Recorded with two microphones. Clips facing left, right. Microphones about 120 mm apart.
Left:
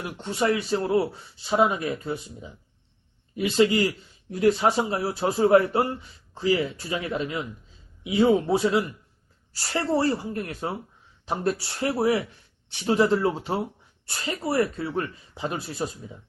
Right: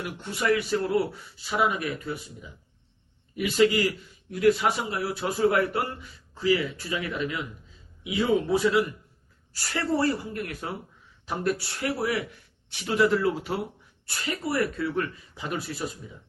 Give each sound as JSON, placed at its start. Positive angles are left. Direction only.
{"t": 0.0, "sound": "speech", "side_deg": 30}